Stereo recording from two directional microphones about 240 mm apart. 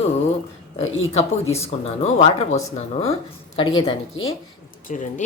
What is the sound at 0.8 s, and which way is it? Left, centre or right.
Speech, left.